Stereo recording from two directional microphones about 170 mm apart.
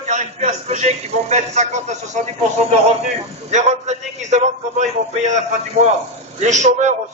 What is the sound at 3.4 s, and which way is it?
A man's voice, 45° right (ahead or behind).